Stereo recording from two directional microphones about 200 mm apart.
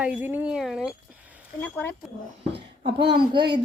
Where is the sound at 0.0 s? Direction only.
5° right (ahead or behind).